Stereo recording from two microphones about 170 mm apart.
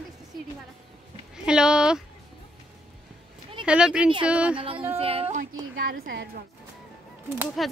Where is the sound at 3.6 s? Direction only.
5° right (ahead or behind).